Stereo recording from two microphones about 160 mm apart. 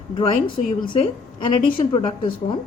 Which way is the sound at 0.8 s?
30° left (ahead or behind).